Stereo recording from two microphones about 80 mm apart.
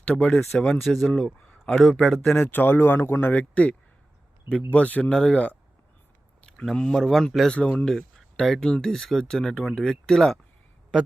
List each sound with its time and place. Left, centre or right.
0.0 s speech: centre
2.5 s speech: left; by 10.3 s centre